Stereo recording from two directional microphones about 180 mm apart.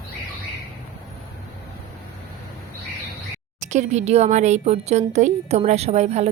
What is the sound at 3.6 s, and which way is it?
Speech, 40° right (ahead or behind).